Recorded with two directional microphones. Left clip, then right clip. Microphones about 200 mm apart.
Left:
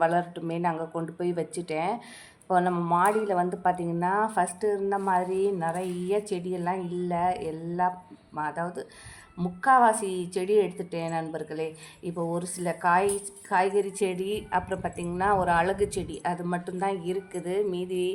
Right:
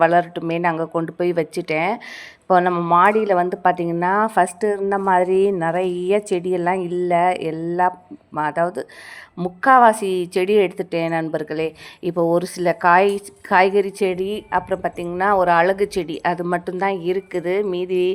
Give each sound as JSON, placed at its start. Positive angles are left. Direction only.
{"t": 0.0, "sound": "a woman's voice", "side_deg": -25}